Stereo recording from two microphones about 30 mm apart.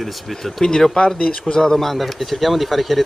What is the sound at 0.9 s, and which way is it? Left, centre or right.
Mantra, left.